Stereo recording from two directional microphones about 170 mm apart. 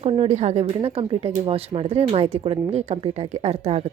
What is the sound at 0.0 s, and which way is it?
A woman's voice, 40° right (ahead or behind).